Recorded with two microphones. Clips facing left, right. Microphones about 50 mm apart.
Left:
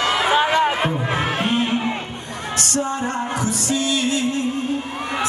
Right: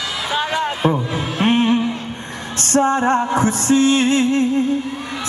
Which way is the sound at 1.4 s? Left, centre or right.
Right.